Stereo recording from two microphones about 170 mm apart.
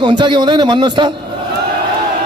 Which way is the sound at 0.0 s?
25° right (ahead or behind).